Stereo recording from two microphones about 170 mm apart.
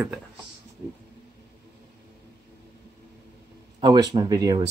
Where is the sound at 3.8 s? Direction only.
25° right (ahead or behind).